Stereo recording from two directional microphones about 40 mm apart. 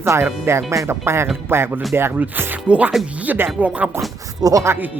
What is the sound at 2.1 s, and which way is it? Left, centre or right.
Speech, right.